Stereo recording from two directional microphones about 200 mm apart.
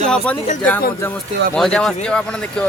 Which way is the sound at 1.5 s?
5° left (ahead or behind).